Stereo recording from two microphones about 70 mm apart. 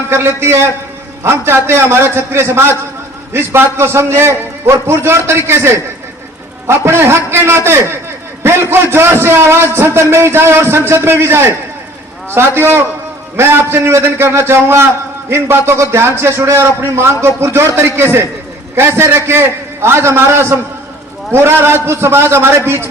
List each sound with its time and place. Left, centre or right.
0.1 s a man's voice: right